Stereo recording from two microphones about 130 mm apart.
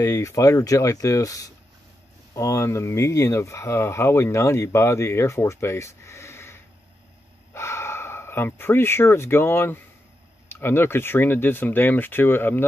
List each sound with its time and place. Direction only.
0.0 s speech: 25° left (ahead or behind)